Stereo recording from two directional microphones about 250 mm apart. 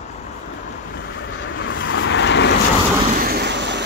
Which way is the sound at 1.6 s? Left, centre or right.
Left.